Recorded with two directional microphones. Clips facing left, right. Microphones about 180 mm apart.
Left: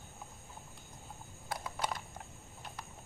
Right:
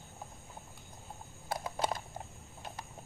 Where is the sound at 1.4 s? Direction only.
25° right (ahead or behind).